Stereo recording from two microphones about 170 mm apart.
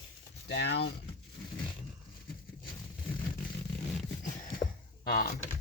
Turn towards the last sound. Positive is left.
turn(degrees=65)  # may be behind; listen again after turning